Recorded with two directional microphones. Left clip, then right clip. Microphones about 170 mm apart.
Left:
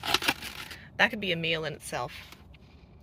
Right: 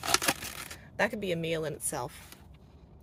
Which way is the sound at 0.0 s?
15° right (ahead or behind).